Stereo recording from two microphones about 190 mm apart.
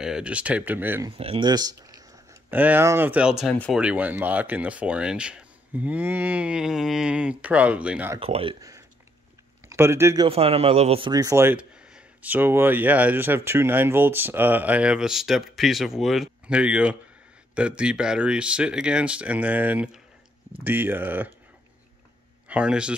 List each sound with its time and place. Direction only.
0.0 s speech: 5° right (ahead or behind)
1.1 s speech: 30° right (ahead or behind); by 3.8 s centre (ahead or behind)
3.8 s speech: 10° right (ahead or behind)
8.2 s speech: 30° right (ahead or behind)
8.5 s speech: 15° right (ahead or behind)
10.2 s speech: 30° right (ahead or behind)
11.1 s speech: 20° right (ahead or behind)
22.5 s speech: 5° right (ahead or behind)